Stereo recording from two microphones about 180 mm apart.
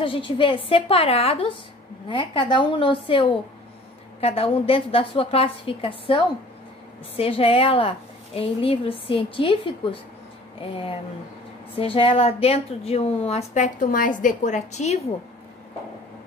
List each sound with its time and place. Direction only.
0.0 s a woman's voice: 30° left (ahead or behind)